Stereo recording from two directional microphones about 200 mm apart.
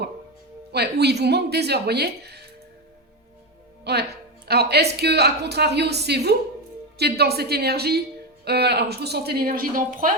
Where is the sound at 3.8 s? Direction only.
55° right (ahead or behind).